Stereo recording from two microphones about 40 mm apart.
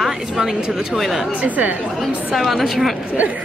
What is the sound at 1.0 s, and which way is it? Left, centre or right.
Speech, centre.